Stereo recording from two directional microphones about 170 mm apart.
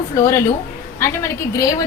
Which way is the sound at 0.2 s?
15° left (ahead or behind).